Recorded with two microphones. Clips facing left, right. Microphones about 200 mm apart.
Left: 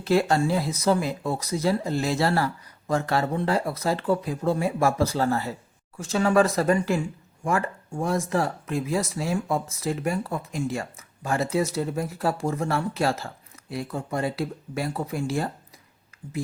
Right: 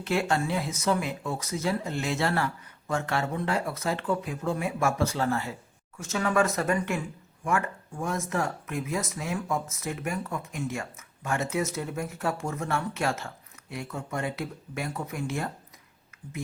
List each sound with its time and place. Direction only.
0.0 s speech: 35° left (ahead or behind)